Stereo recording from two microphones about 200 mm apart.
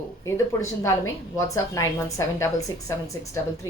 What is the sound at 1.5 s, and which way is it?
A woman's voice, 15° left (ahead or behind).